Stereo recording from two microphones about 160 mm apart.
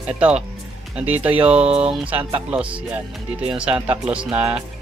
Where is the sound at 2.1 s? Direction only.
35° right (ahead or behind).